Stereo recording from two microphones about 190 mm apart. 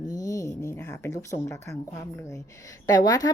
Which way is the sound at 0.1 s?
20° left (ahead or behind).